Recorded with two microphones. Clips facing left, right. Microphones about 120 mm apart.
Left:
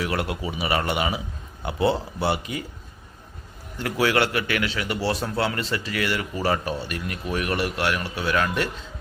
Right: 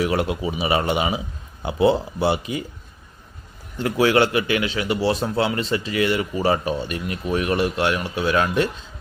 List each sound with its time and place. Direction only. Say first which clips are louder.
0.0 s a man's voice: right 5 dB; 20° right (ahead or behind)
3.8 s a man's voice: right 4 dB; 25° right (ahead or behind)